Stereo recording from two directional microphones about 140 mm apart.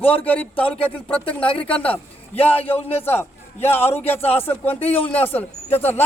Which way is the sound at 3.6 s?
45° left (ahead or behind).